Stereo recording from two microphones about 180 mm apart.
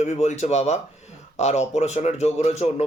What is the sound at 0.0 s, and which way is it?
Speech, 40° left (ahead or behind).